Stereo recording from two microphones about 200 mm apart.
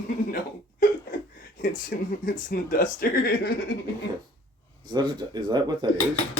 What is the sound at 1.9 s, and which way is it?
Speech, 50° left (ahead or behind).